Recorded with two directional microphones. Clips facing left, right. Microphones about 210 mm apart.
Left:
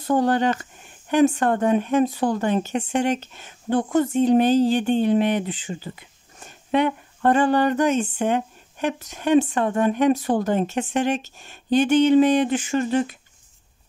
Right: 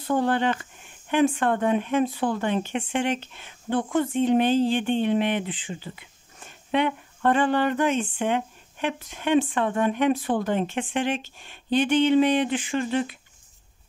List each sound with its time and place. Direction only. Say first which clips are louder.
0.0 s speech: left 3 dB; 40° left (ahead or behind)